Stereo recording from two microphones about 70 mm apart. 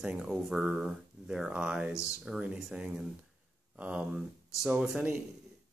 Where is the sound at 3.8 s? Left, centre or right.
Centre.